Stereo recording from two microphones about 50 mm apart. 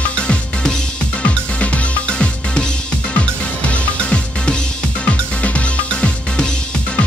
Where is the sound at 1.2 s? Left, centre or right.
Left.